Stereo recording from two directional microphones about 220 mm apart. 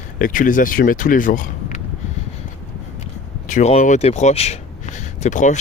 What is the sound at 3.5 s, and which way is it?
Speech, 35° left (ahead or behind).